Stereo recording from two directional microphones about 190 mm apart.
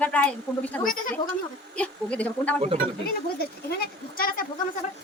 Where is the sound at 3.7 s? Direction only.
50° left (ahead or behind).